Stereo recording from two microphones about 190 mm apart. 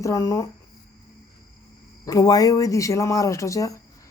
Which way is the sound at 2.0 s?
20° left (ahead or behind).